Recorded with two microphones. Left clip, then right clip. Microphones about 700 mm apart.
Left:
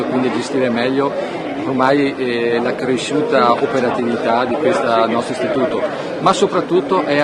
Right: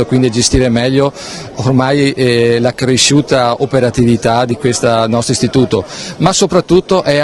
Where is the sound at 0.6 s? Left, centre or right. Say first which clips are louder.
Right 2 dB; right.